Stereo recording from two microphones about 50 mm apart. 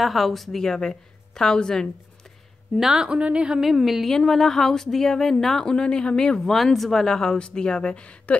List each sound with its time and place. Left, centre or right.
0.0 s a woman's voice: centre
2.8 s a woman's voice: centre
3.1 s a woman's voice: right
3.6 s a woman's voice: centre
6.5 s a woman's voice: centre; by 8.4 s left